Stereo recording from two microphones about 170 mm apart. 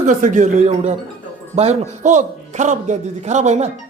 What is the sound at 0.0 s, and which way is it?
A man's voice, 45° right (ahead or behind).